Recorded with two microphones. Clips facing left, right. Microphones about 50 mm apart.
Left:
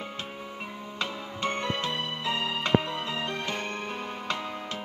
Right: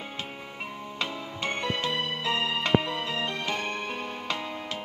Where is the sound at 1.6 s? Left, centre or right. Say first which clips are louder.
Right 1 dB; centre.